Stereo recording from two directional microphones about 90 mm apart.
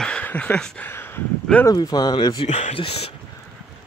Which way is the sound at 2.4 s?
90° left.